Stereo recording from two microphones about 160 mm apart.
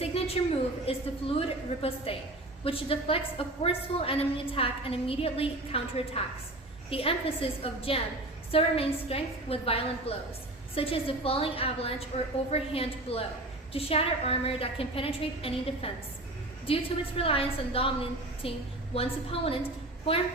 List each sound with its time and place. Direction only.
0.4 s a woman's voice: 40° left (ahead or behind)